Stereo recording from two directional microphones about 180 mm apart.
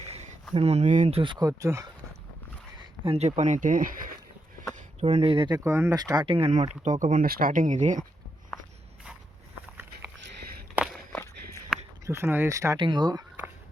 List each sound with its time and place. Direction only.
0.0 s a sound: 40° right (ahead or behind)
0.5 s speech: 35° right (ahead or behind); by 1.9 s 20° right (ahead or behind)
3.0 s speech: 35° right (ahead or behind)
4.9 s speech: 35° right (ahead or behind)
5.5 s speech: 15° right (ahead or behind); by 8.0 s 40° right (ahead or behind)
10.9 s walk: 10° left (ahead or behind)
12.0 s speech: 15° right (ahead or behind)